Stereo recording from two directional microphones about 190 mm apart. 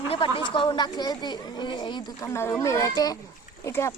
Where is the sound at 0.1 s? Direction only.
25° left (ahead or behind).